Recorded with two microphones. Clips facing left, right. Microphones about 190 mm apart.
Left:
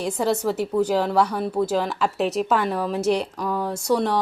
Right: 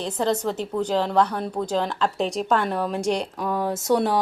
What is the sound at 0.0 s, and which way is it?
A woman's voice, 10° left (ahead or behind).